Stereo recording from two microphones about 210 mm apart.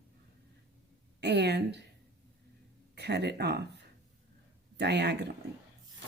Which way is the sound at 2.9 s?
50° right (ahead or behind).